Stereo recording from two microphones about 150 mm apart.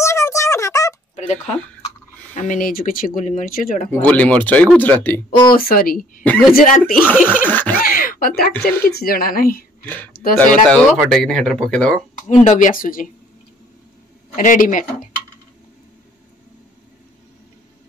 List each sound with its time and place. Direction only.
0.0 s a sound: 20° left (ahead or behind)
1.1 s a sound: 50° left (ahead or behind)
2.3 s speech: 60° left (ahead or behind)
3.9 s speech: 10° left (ahead or behind)
5.5 s a woman's voice: 75° left (ahead or behind)
7.4 s speech: 10° left (ahead or behind)
7.8 s a sound: 70° left (ahead or behind)
8.5 s speech: 10° left (ahead or behind)
8.9 s a woman's voice: 85° left
9.8 s speech: 10° left (ahead or behind)
12.3 s speech: 55° left (ahead or behind)
14.3 s speech: 60° left (ahead or behind)